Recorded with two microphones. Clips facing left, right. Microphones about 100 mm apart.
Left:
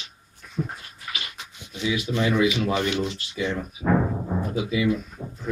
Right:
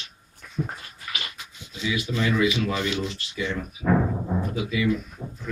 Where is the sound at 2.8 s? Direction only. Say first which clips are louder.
Left 2 dB; 55° left (ahead or behind).